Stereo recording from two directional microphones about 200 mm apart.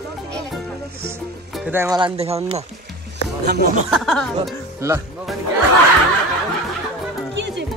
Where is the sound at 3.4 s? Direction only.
55° right (ahead or behind).